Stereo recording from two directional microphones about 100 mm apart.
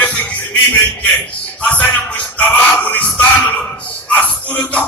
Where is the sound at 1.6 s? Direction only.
15° left (ahead or behind).